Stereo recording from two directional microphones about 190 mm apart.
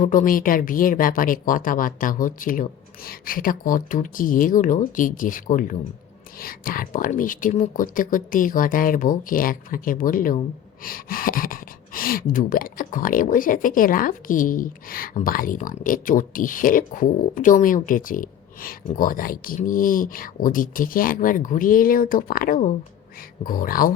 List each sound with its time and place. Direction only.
0.0 s speech: 45° left (ahead or behind)